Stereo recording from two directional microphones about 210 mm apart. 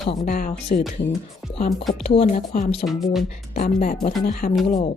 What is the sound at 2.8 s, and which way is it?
Speech, centre (ahead or behind).